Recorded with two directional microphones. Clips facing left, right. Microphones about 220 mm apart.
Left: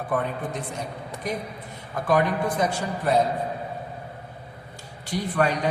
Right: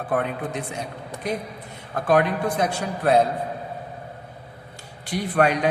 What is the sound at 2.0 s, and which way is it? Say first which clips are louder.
A man's voice: right 2 dB; 65° right (ahead or behind).